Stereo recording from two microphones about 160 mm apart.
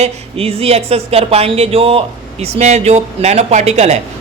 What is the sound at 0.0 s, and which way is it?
Speech, 35° right (ahead or behind).